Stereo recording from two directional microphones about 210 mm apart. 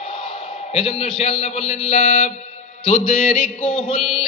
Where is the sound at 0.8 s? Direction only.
25° left (ahead or behind).